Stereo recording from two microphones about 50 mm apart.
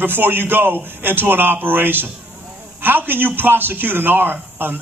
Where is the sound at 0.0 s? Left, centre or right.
Right.